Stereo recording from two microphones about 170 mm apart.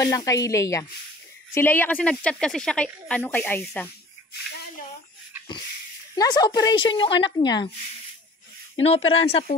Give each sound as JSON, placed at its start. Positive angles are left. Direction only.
{"t": 0.0, "sound": "speech", "side_deg": 20}
{"t": 6.1, "sound": "speech", "side_deg": 25}
{"t": 8.8, "sound": "speech", "side_deg": 35}